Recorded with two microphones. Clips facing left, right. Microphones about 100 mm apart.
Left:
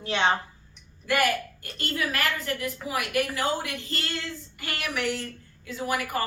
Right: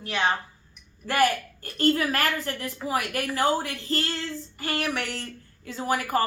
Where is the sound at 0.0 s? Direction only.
25° left (ahead or behind).